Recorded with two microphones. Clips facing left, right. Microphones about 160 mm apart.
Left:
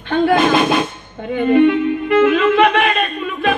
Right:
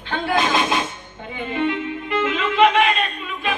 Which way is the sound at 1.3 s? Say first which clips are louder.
Left 11 dB; 60° left (ahead or behind).